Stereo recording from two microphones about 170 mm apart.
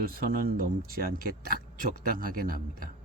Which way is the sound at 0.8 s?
60° right (ahead or behind).